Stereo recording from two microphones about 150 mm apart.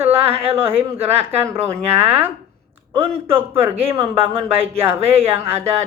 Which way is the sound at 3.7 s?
40° right (ahead or behind).